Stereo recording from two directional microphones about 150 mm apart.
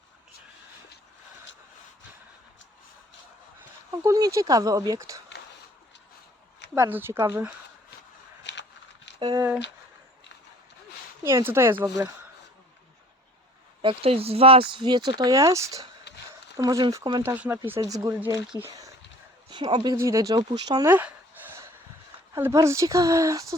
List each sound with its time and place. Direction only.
3.9 s speech: 20° right (ahead or behind)
6.7 s speech: 15° right (ahead or behind)
9.2 s speech: 25° right (ahead or behind)
11.2 s speech: 20° right (ahead or behind)
13.8 s speech: 40° right (ahead or behind); by 17.2 s 25° right (ahead or behind)
17.2 s speech: 10° right (ahead or behind)
17.7 s speech: 25° right (ahead or behind)
18.7 s a sound: 20° right (ahead or behind)
19.5 s speech: 30° right (ahead or behind)
20.8 s a sound: 15° right (ahead or behind)
22.4 s speech: 15° right (ahead or behind)